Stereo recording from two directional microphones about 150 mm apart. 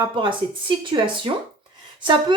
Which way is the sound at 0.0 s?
35° right (ahead or behind).